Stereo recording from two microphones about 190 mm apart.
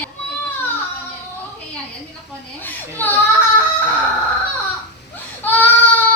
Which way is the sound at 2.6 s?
10° left (ahead or behind).